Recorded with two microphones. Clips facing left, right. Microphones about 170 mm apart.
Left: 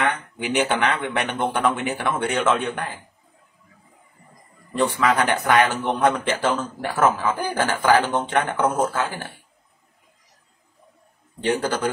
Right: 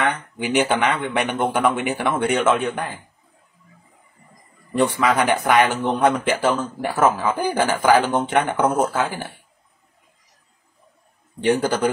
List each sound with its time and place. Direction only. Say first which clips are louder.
0.4 s a man's voice: right 2 dB; 5° right (ahead or behind)
5.0 s a man's voice: right 2 dB; 10° right (ahead or behind)
11.4 s a man's voice: right 4 dB; 10° right (ahead or behind)